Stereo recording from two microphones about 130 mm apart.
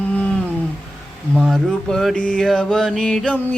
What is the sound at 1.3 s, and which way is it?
Mantra, centre (ahead or behind).